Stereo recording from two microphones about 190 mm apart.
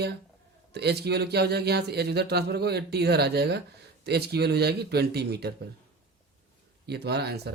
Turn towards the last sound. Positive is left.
turn(degrees=-60)  # may be behind; listen again after turning